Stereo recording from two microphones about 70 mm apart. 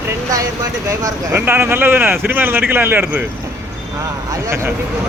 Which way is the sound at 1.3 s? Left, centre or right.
Right.